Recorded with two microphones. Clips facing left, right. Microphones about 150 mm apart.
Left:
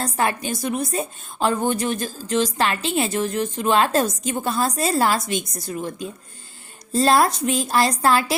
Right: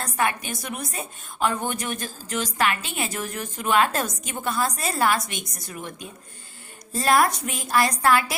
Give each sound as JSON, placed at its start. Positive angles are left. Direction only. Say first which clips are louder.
{"t": 0.0, "sound": "a woman's voice", "louder": "left 3 dB", "side_deg": 30}